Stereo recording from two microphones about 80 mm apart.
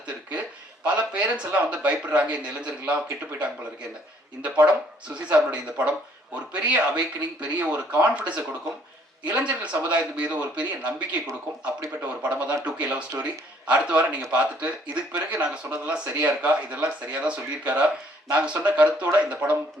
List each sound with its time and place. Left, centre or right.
0.9 s a man's voice: centre
4.6 s a man's voice: centre